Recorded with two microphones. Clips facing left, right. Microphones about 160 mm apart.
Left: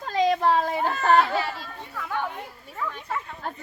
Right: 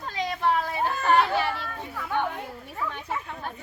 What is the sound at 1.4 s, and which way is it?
Children playing, 65° right (ahead or behind).